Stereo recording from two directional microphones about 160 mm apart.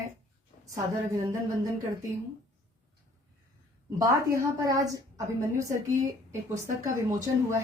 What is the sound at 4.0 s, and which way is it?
A woman's voice, 20° right (ahead or behind).